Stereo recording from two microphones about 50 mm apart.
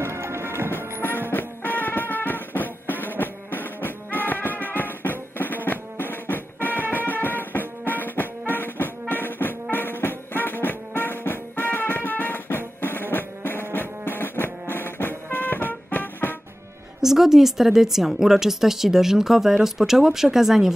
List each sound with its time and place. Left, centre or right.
0.0 s music: right
1.3 s music: left
17.0 s a woman's voice: centre